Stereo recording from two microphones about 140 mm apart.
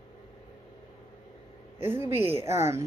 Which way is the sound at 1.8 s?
15° right (ahead or behind).